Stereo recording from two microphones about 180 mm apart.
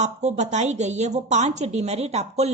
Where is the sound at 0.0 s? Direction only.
40° right (ahead or behind).